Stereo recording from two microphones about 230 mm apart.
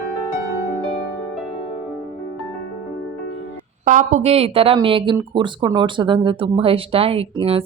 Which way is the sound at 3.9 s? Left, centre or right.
Right.